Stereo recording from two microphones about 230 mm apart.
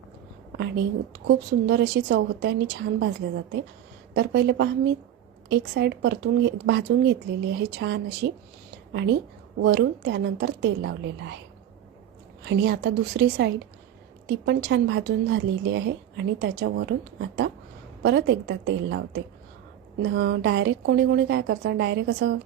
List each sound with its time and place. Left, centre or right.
0.5 s a woman's voice: right
4.1 s a woman's voice: right
12.5 s a woman's voice: right